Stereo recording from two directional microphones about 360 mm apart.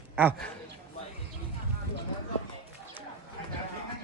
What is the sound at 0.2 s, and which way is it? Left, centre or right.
Speech, centre.